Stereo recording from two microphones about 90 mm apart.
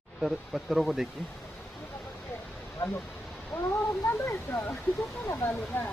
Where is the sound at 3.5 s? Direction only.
20° left (ahead or behind).